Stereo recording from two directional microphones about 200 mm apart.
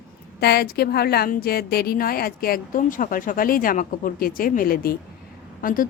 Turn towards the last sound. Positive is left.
turn(degrees=45)  # may be behind; listen again after turning